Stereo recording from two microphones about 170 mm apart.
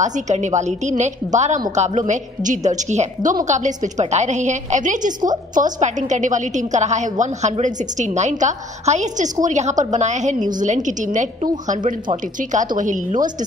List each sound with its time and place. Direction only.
0.0 s a woman's voice: 45° right (ahead or behind)